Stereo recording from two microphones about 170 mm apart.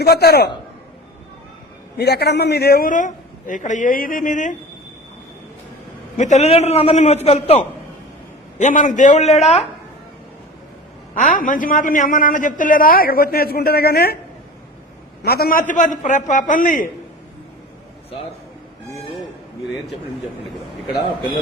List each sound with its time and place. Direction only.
0.0 s a man's voice: 70° left (ahead or behind)
2.0 s a man's voice: 70° left (ahead or behind); by 4.5 s 50° left (ahead or behind)
6.1 s a man's voice: 45° left (ahead or behind)
11.1 s a man's voice: 55° left (ahead or behind)
15.2 s a man's voice: 65° left (ahead or behind)
15.7 s a man's voice: 45° left (ahead or behind)